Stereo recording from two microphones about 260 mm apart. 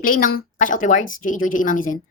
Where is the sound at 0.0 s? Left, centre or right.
Left.